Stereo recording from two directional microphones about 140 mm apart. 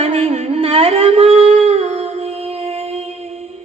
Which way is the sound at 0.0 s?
45° right (ahead or behind).